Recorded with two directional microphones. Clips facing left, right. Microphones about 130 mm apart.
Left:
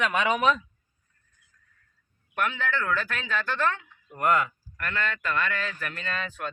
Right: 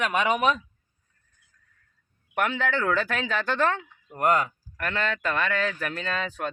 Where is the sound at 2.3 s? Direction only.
80° right; by 3.6 s 65° right (ahead or behind).